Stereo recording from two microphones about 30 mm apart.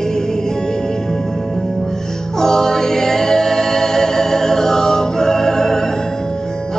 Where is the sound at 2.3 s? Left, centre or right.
Centre.